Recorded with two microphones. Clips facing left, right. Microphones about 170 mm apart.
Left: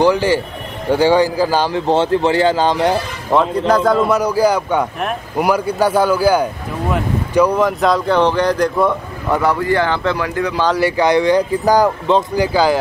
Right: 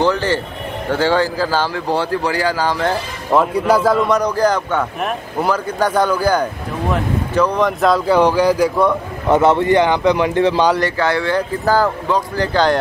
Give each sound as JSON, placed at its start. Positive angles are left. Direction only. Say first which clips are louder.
{"t": 0.0, "sound": "a man's voice", "louder": "left 3 dB", "side_deg": 10}
{"t": 3.3, "sound": "a man's voice", "louder": "even", "side_deg": -5}
{"t": 9.3, "sound": "speech", "louder": "right 3 dB", "side_deg": -25}
{"t": 10.8, "sound": "a man's voice", "louder": "left 4 dB", "side_deg": 15}